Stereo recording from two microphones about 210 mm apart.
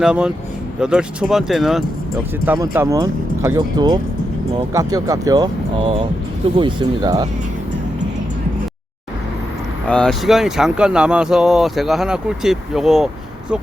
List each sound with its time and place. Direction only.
0.0 s speech: 5° right (ahead or behind)
9.8 s speech: 5° left (ahead or behind)